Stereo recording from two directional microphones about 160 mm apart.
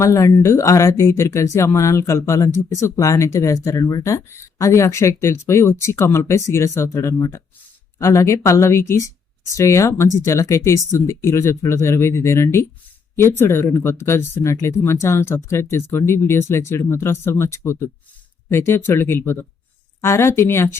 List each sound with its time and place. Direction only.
0.0 s speech: 20° left (ahead or behind)